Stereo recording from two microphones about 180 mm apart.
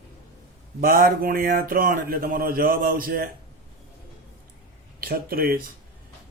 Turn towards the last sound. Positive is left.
turn(degrees=-55)  # may be behind; listen again after turning